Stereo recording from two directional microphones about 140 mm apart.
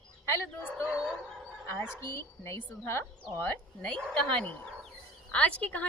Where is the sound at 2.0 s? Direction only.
20° left (ahead or behind).